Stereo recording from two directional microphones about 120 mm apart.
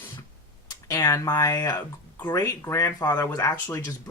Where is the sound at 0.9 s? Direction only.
30° left (ahead or behind).